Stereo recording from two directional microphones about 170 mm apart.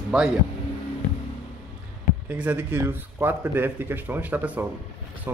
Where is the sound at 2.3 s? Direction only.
10° right (ahead or behind).